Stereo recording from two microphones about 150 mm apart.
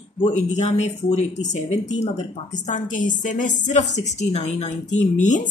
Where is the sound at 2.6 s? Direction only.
55° left (ahead or behind).